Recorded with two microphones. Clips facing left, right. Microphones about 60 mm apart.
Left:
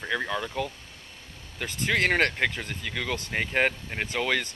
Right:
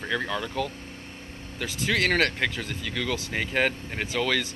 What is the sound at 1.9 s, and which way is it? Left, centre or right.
Speech, centre.